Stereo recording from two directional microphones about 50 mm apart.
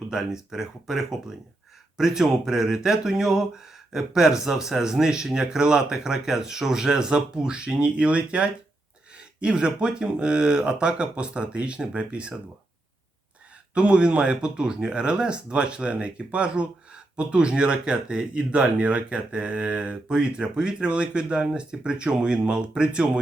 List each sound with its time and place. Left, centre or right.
0.1 s speech: centre
13.7 s speech: right